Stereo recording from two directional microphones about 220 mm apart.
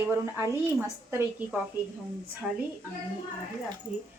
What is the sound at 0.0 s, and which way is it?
A woman's voice, 10° right (ahead or behind).